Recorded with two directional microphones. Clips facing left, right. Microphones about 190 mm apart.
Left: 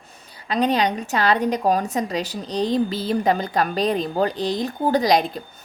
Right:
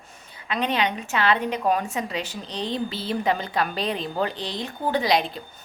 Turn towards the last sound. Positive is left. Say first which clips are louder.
# left 4 dB
turn(degrees=45)  # may be behind; listen again after turning